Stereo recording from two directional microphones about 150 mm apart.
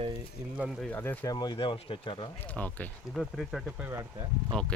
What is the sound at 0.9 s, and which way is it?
Speech, 10° left (ahead or behind).